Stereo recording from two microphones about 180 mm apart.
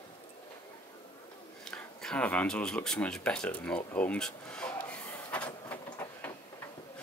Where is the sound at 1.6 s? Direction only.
5° left (ahead or behind).